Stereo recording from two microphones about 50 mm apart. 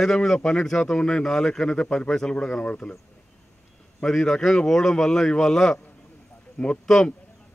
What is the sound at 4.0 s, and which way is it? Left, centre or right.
A man's voice, centre.